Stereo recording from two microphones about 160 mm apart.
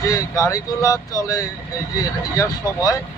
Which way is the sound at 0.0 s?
20° left (ahead or behind).